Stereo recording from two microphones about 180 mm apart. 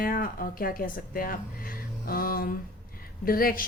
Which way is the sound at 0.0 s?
55° left (ahead or behind).